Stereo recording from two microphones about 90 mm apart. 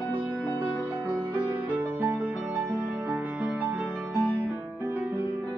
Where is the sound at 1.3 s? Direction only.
20° right (ahead or behind).